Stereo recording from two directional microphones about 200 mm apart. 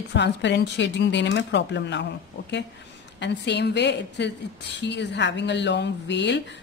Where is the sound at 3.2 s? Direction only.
60° left (ahead or behind).